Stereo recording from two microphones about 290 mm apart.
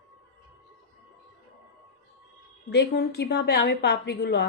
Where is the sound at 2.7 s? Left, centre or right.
Left.